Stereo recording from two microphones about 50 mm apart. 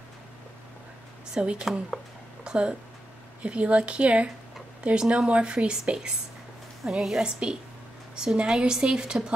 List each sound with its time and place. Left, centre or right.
1.3 s a woman's voice: centre